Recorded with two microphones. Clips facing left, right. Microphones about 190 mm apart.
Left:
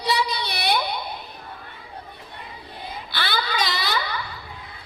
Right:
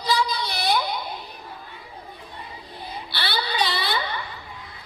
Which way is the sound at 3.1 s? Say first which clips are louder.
Left 2 dB; 45° left (ahead or behind).